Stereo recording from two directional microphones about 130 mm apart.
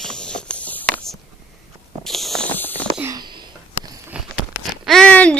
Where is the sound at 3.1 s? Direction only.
35° right (ahead or behind).